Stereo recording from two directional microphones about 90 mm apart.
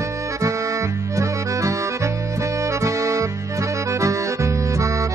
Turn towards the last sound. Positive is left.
turn(degrees=-35)  # may be behind; listen again after turning